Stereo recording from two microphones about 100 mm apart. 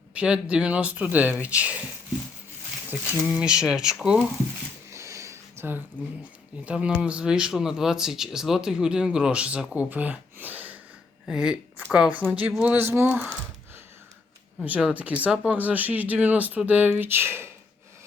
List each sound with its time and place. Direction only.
0.1 s speech: 10° right (ahead or behind)
3.3 s speech: 10° right (ahead or behind)
4.9 s a sound: 30° right (ahead or behind)
6.7 s speech: 10° right (ahead or behind)
11.3 s speech: 5° right (ahead or behind)
12.7 s speech: 20° right (ahead or behind)
14.8 s speech: 10° right (ahead or behind)